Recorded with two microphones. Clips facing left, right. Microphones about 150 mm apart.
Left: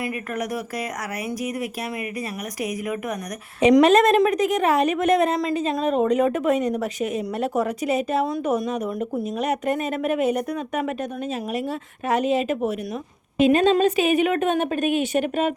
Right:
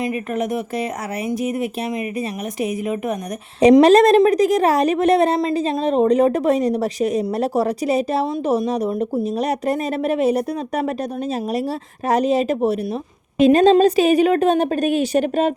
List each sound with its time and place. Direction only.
0.0 s a woman's voice: 25° right (ahead or behind)
12.0 s a woman's voice: 35° right (ahead or behind)